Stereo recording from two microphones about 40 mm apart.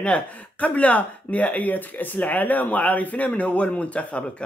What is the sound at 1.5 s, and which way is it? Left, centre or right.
Speech, left.